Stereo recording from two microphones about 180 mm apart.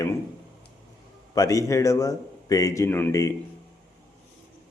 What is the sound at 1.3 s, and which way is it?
A man's voice, 20° left (ahead or behind).